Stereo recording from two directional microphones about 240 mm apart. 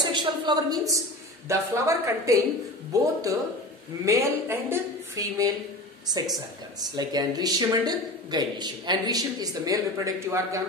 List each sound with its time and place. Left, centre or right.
0.0 s a sound: centre
1.5 s a man's voice: centre
7.0 s a man's voice: centre